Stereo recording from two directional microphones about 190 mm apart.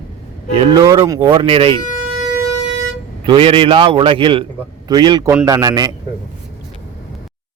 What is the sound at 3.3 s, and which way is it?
Speech, 25° right (ahead or behind).